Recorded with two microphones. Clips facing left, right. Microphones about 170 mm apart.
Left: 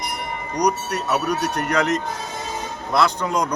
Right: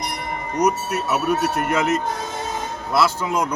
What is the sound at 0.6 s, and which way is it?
A man's voice, 5° right (ahead or behind).